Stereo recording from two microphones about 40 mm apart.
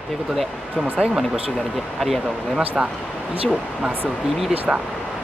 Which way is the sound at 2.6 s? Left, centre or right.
Right.